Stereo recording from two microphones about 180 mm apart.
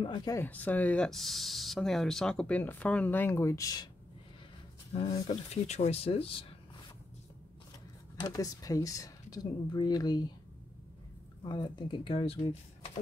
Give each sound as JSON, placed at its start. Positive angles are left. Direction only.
{"t": 0.0, "sound": "speech", "side_deg": 25}
{"t": 4.9, "sound": "speech", "side_deg": 35}
{"t": 8.2, "sound": "speech", "side_deg": 20}
{"t": 11.4, "sound": "speech", "side_deg": 25}